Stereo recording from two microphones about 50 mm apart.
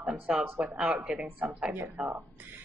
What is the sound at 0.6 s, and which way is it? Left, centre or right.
Speech, right.